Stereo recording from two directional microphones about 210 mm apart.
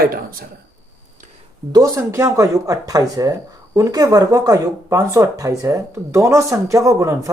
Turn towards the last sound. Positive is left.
turn(degrees=-15)  # may be behind; listen again after turning